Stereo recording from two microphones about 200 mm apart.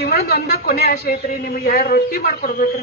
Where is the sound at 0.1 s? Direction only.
50° left (ahead or behind).